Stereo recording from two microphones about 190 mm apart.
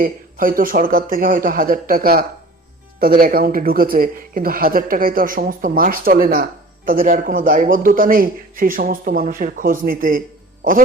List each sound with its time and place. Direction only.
0.0 s speech: 50° right (ahead or behind)